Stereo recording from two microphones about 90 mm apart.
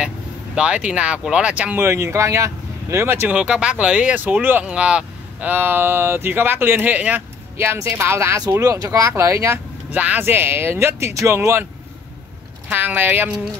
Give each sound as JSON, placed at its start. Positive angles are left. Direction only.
{"t": 0.6, "sound": "speech", "side_deg": -10}
{"t": 1.9, "sound": "speech", "side_deg": -35}
{"t": 3.3, "sound": "speech", "side_deg": -10}
{"t": 7.5, "sound": "speech", "side_deg": -25}
{"t": 9.9, "sound": "speech", "side_deg": -20}
{"t": 12.6, "sound": "speech", "side_deg": -20}